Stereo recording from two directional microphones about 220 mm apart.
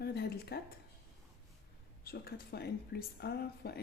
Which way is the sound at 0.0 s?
45° left (ahead or behind).